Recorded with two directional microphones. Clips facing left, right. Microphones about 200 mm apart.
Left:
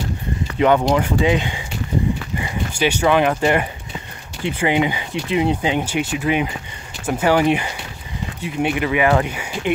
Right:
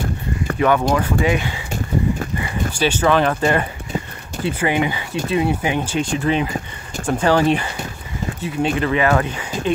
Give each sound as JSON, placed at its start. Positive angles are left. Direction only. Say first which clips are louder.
{"t": 0.6, "sound": "speech", "louder": "left 2 dB", "side_deg": 20}